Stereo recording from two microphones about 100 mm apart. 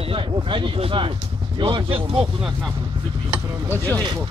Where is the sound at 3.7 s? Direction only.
20° left (ahead or behind).